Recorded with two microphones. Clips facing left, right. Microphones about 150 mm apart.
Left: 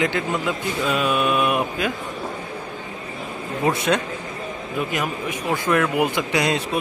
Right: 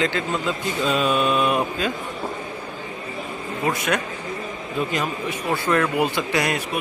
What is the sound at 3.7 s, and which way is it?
Speech, 25° left (ahead or behind).